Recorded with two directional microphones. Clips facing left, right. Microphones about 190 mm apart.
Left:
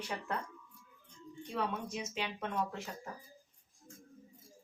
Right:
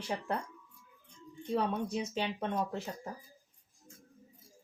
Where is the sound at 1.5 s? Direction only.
35° right (ahead or behind).